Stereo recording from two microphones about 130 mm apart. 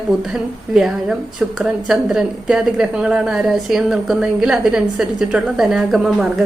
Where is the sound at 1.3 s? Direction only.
5° right (ahead or behind).